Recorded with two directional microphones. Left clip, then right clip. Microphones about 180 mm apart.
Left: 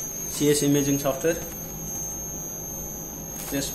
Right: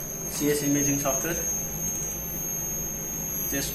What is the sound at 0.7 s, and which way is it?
Speech, 75° left (ahead or behind).